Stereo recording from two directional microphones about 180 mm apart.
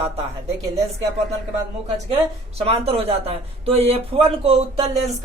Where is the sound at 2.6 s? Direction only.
35° right (ahead or behind).